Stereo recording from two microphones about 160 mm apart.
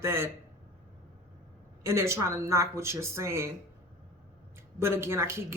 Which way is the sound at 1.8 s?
15° right (ahead or behind).